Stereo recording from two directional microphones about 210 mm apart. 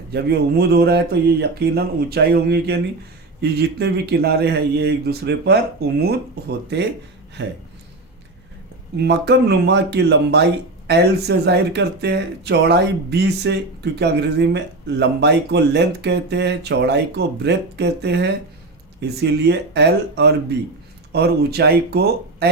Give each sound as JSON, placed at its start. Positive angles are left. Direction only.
{"t": 0.1, "sound": "speech", "side_deg": -50}
{"t": 9.0, "sound": "speech", "side_deg": -55}